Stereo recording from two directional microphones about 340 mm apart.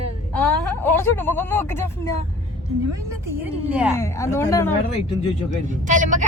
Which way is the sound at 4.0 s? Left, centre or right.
Centre.